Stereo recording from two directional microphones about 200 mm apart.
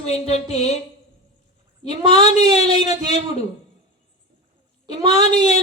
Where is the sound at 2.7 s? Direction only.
20° right (ahead or behind).